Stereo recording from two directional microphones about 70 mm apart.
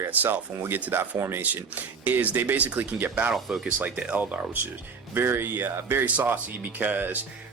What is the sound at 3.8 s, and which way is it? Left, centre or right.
Speech, right.